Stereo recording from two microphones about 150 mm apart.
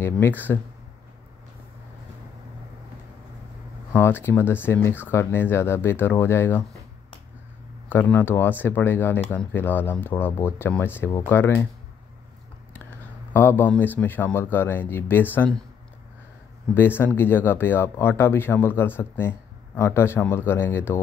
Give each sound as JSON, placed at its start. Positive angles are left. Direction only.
{"t": 0.0, "sound": "speech", "side_deg": 15}
{"t": 3.9, "sound": "speech", "side_deg": 15}
{"t": 7.9, "sound": "speech", "side_deg": 15}
{"t": 13.3, "sound": "speech", "side_deg": 15}
{"t": 16.7, "sound": "speech", "side_deg": 15}